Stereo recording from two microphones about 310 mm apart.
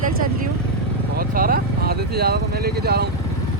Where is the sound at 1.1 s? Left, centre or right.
Right.